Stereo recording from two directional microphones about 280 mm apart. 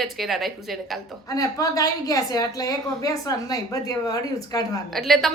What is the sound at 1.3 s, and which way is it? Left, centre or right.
A woman's voice, centre.